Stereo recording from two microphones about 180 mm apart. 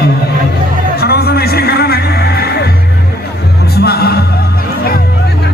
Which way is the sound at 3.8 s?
60° left (ahead or behind).